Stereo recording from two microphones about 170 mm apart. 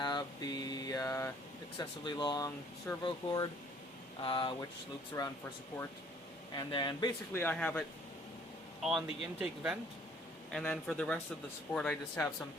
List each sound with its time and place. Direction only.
0.0 s mantra: 25° left (ahead or behind)
1.8 s speech: 25° left (ahead or behind)
6.6 s speech: 30° left (ahead or behind)
7.3 s speech: 10° left (ahead or behind)
10.5 s speech: 5° left (ahead or behind)